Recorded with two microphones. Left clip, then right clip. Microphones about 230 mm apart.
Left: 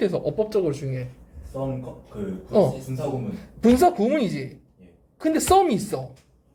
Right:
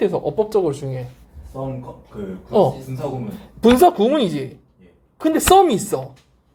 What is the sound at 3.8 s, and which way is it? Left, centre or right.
Speech, right.